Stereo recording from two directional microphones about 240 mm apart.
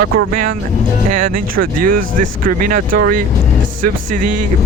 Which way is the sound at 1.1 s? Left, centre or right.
Right.